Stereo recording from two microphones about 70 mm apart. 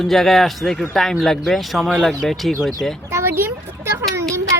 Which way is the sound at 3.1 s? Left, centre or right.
Right.